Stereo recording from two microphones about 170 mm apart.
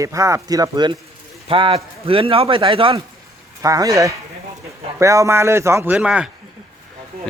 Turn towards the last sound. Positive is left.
turn(degrees=-5)  # may be behind; listen again after turning